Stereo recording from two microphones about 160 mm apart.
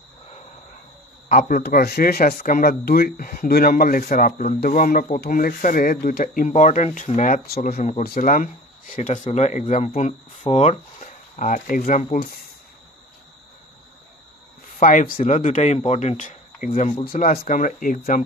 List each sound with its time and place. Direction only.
1.3 s speech: 60° left (ahead or behind)
6.5 s speech: 50° left (ahead or behind)
7.4 s speech: 70° left (ahead or behind); by 12.2 s 50° left (ahead or behind)
14.8 s speech: 50° left (ahead or behind)